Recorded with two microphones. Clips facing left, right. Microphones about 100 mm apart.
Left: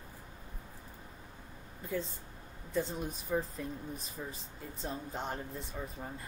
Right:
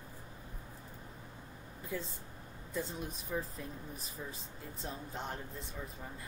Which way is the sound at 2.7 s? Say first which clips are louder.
Left 5 dB; centre (ahead or behind).